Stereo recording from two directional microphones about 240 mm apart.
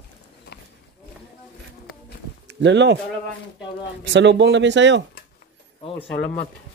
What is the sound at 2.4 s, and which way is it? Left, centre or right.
Speech, right.